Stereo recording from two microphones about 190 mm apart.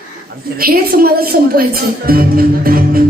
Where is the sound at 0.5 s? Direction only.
50° right (ahead or behind).